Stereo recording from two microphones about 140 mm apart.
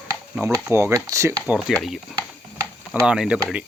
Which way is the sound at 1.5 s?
Centre (ahead or behind).